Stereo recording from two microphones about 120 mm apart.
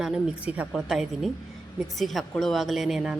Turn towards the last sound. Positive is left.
turn(degrees=-5)  # may be behind; listen again after turning